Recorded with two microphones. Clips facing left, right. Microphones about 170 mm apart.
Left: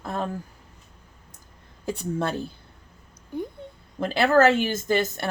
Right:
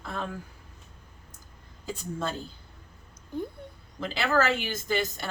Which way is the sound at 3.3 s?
10° left (ahead or behind).